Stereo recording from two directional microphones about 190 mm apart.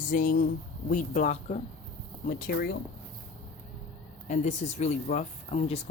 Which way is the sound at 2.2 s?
50° left (ahead or behind).